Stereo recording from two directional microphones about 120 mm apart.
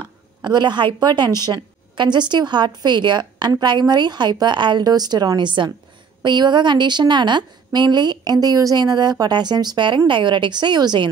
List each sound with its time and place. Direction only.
0.4 s a woman's voice: 40° right (ahead or behind)